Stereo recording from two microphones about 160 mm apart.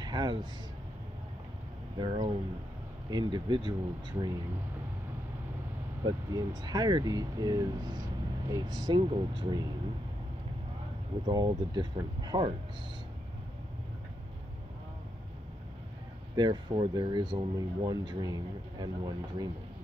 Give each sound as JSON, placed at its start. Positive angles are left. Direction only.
{"t": 0.0, "sound": "speech", "side_deg": -25}
{"t": 2.0, "sound": "speech", "side_deg": -30}
{"t": 6.0, "sound": "speech", "side_deg": -25}
{"t": 11.2, "sound": "speech", "side_deg": -25}
{"t": 16.3, "sound": "speech", "side_deg": -30}